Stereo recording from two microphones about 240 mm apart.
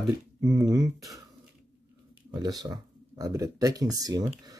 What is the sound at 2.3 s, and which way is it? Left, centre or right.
Speech, centre.